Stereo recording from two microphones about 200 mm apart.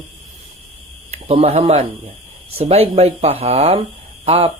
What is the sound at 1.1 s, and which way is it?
A man's voice, 30° right (ahead or behind).